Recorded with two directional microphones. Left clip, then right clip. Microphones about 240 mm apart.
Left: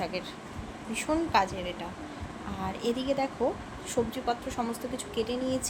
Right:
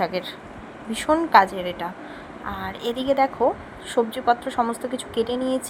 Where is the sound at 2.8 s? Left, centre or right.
Centre.